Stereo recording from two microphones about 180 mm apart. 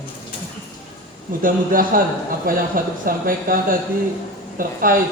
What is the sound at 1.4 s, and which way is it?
Speech, 50° right (ahead or behind).